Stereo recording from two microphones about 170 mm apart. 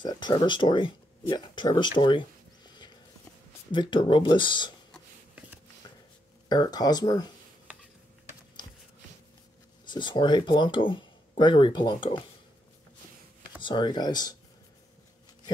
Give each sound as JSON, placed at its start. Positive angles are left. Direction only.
{"t": 0.0, "sound": "speech", "side_deg": 25}
{"t": 3.7, "sound": "speech", "side_deg": 30}
{"t": 6.5, "sound": "speech", "side_deg": 25}
{"t": 9.8, "sound": "speech", "side_deg": 25}
{"t": 13.6, "sound": "speech", "side_deg": 25}